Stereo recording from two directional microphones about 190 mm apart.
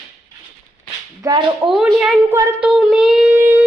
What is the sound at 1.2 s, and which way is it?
Speech, 20° right (ahead or behind).